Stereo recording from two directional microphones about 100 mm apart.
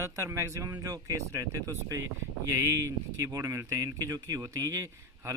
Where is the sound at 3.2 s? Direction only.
30° right (ahead or behind).